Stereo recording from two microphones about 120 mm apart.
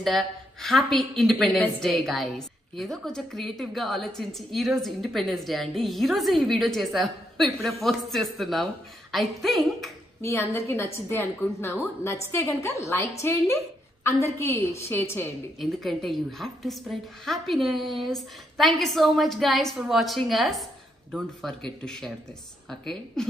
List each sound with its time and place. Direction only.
0.0 s a woman's voice: centre (ahead or behind)
10.2 s a woman's voice: 25° left (ahead or behind)
15.6 s a woman's voice: centre (ahead or behind)